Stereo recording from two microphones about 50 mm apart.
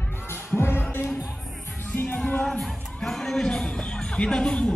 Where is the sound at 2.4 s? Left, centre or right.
Centre.